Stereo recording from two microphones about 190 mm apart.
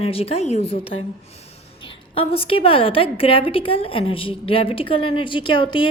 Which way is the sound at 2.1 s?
30° left (ahead or behind).